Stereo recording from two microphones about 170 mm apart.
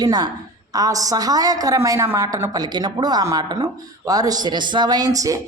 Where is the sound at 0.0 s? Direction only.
25° right (ahead or behind).